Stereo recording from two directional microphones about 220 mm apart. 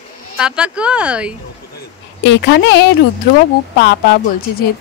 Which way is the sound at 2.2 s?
50° left (ahead or behind).